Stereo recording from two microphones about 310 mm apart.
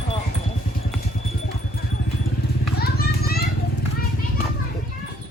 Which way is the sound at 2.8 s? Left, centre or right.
Left.